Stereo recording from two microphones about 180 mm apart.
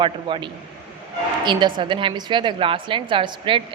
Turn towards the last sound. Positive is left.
turn(degrees=-30)  # may be behind; listen again after turning